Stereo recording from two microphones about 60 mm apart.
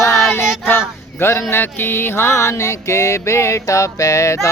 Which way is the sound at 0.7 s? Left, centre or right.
Left.